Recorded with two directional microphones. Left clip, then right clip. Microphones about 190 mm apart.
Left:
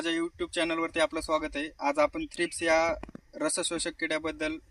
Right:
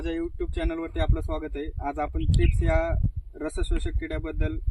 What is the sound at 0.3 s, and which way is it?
Speech, 20° left (ahead or behind).